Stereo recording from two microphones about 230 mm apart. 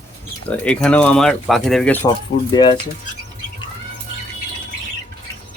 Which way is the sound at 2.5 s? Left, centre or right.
Centre.